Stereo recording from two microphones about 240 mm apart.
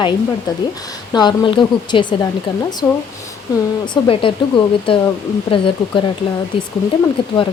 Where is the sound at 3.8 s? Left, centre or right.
Centre.